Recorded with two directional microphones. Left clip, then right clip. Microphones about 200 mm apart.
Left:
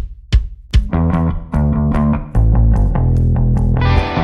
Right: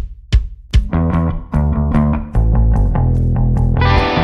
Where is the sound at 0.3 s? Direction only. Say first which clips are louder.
Even; centre (ahead or behind).